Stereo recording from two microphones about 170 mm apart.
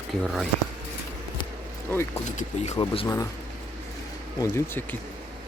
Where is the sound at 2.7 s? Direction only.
35° left (ahead or behind).